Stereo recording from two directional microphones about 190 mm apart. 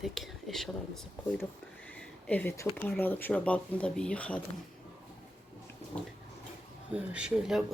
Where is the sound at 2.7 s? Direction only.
10° left (ahead or behind).